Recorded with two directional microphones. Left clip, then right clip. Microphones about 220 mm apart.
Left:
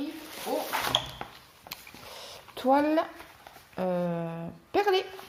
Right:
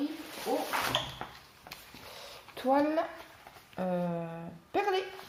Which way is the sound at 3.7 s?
40° left (ahead or behind).